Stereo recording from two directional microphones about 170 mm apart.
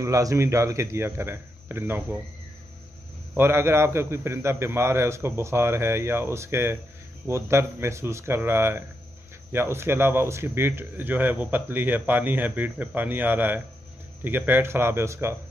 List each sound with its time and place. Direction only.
0.0 s speech: 20° right (ahead or behind)
3.3 s speech: 15° right (ahead or behind)